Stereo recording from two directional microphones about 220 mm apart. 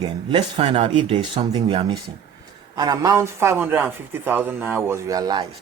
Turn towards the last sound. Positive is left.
turn(degrees=-20)  # may be behind; listen again after turning